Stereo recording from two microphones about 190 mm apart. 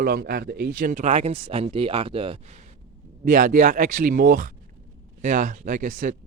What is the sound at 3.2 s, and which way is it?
Speech, 45° right (ahead or behind).